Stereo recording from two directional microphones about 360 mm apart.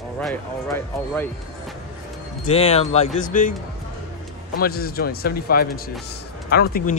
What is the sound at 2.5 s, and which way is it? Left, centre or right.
Speech, centre.